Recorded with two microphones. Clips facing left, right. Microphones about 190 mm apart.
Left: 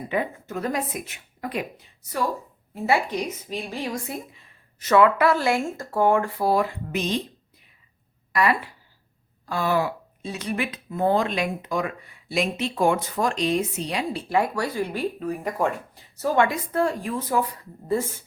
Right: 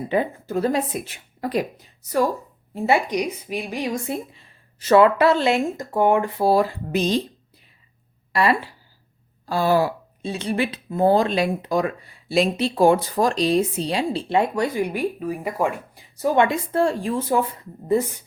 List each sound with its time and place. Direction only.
0.1 s a woman's voice: 30° right (ahead or behind)
2.7 s speech: 25° right (ahead or behind)
8.3 s speech: 30° right (ahead or behind)